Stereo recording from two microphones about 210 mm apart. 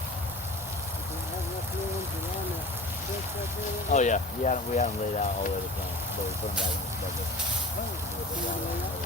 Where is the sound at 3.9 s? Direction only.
35° left (ahead or behind).